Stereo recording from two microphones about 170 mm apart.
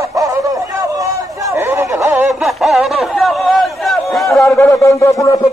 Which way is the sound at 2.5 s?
Centre (ahead or behind).